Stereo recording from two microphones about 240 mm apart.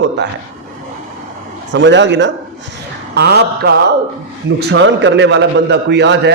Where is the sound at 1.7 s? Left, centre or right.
Right.